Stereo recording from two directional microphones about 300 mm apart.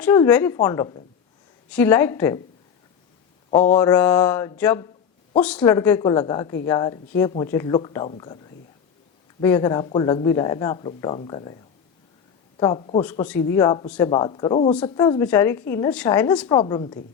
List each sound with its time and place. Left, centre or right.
0.0 s speech: centre
3.5 s speech: centre
12.5 s speech: centre